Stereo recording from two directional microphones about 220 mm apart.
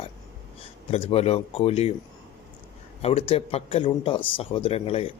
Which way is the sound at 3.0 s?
25° left (ahead or behind).